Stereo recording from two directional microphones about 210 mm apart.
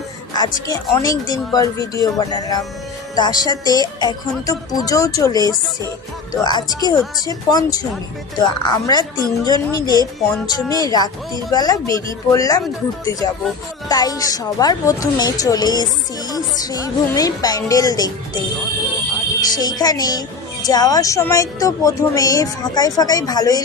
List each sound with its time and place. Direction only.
0.3 s a woman's voice: 20° left (ahead or behind)
19.5 s a woman's voice: 20° left (ahead or behind)